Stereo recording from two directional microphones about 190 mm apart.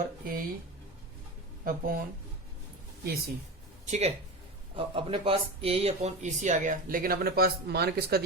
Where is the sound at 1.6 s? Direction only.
50° right (ahead or behind).